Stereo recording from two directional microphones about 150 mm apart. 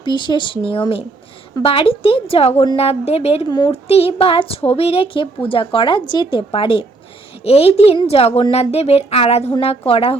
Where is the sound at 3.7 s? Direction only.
40° left (ahead or behind).